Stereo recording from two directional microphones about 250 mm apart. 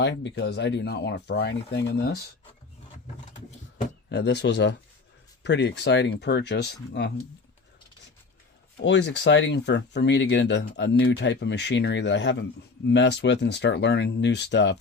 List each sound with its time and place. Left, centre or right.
0.0 s speech: left
4.1 s speech: left
8.8 s speech: left